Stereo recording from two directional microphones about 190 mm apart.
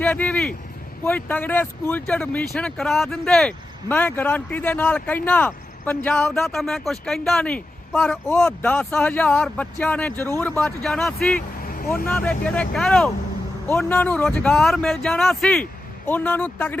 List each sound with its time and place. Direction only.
0.0 s speech: 10° left (ahead or behind)
11.6 s vehicle: 50° left (ahead or behind)
12.0 s speech: 10° left (ahead or behind)